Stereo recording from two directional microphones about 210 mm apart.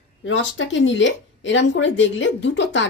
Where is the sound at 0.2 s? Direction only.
65° left (ahead or behind).